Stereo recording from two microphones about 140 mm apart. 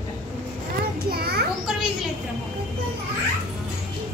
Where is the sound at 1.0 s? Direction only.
90° right.